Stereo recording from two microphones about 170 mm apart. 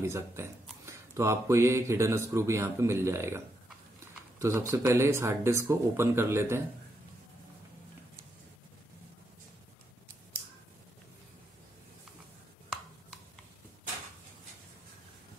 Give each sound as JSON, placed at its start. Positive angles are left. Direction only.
{"t": 0.0, "sound": "speech", "side_deg": -15}